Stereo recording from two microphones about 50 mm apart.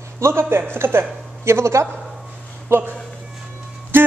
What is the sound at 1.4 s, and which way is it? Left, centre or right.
Speech, right.